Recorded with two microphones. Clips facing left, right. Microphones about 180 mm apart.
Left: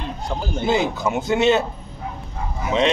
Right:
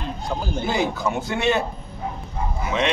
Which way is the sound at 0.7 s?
20° left (ahead or behind).